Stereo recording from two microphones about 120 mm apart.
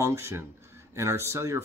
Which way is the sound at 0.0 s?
25° right (ahead or behind).